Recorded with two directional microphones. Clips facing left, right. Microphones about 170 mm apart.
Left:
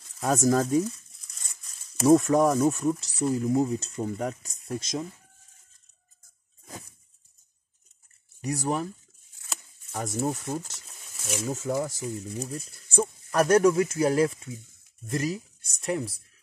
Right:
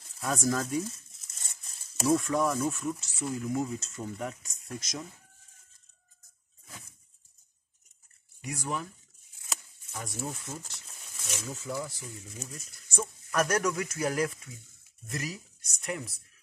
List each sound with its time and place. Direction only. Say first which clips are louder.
0.2 s speech: left 7 dB; 40° left (ahead or behind)
1.3 s a sound: right 1 dB; 30° right (ahead or behind)
2.0 s speech: left 7 dB; 40° left (ahead or behind)
8.4 s speech: left 7 dB; 40° left (ahead or behind)
9.9 s speech: left 9 dB; 40° left (ahead or behind)